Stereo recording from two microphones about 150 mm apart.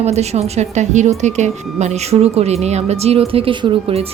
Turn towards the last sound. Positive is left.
turn(degrees=-40)  # may be behind; listen again after turning